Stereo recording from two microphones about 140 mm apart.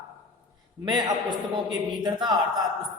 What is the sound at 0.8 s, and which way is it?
A man's voice, 30° right (ahead or behind).